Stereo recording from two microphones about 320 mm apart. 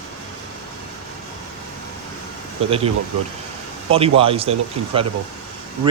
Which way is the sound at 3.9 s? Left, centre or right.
Centre.